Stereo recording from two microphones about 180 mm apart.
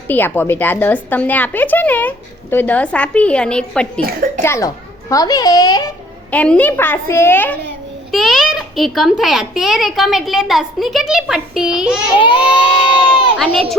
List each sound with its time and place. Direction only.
0.1 s a woman's voice: 10° left (ahead or behind)
4.0 s a child's voice: 50° right (ahead or behind)
4.4 s a child's voice: 15° left (ahead or behind)
6.3 s a woman's voice: 5° left (ahead or behind)
8.1 s a child's voice: centre (ahead or behind)
12.2 s a child's voice: 25° left (ahead or behind)
13.3 s a child's voice: 5° left (ahead or behind)